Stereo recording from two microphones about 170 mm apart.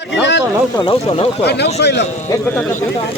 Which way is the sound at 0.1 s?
90° left.